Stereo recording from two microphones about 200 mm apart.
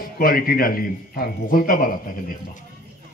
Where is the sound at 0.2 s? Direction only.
45° left (ahead or behind).